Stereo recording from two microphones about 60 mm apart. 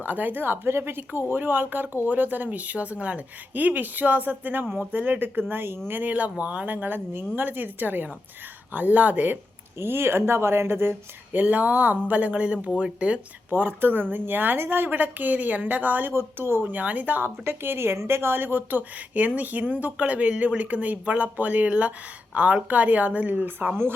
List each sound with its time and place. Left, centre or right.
0.0 s a woman's voice: right
5.9 s a woman's voice: right
9.7 s speech: right; by 13.1 s centre
13.5 s a woman's voice: right
16.7 s speech: right
17.2 s a woman's voice: right